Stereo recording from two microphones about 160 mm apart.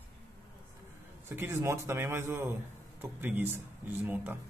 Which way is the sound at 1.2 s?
15° right (ahead or behind).